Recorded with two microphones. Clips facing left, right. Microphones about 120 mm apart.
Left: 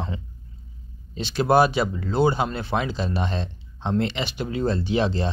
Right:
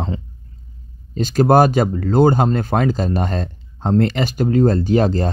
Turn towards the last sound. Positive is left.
turn(degrees=-45)  # may be behind; listen again after turning